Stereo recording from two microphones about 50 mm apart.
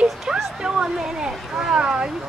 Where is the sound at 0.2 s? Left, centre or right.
Centre.